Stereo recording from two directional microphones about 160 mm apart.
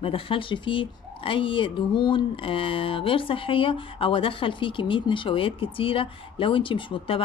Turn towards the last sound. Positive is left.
turn(degrees=30)  # may be behind; listen again after turning